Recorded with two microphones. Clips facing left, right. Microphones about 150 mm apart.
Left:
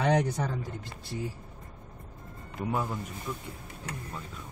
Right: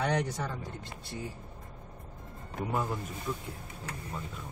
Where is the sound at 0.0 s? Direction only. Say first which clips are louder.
Left 4 dB; 90° left.